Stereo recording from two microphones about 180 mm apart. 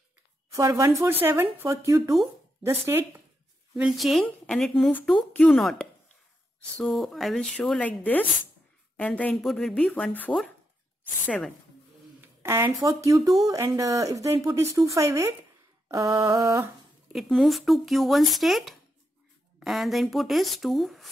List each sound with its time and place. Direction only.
0.5 s speech: 15° right (ahead or behind)
3.7 s speech: centre (ahead or behind)
12.2 s speech: 15° right (ahead or behind)
17.1 s speech: centre (ahead or behind)